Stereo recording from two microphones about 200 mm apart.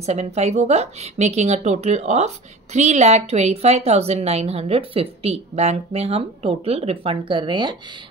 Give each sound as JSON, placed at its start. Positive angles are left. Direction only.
{"t": 0.0, "sound": "a woman's voice", "side_deg": -30}